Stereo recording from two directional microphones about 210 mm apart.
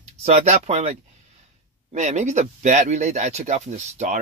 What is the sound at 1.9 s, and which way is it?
Speech, 35° right (ahead or behind).